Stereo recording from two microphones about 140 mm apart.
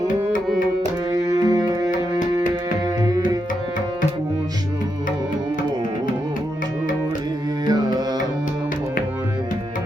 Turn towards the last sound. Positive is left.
turn(degrees=-30)  # may be behind; listen again after turning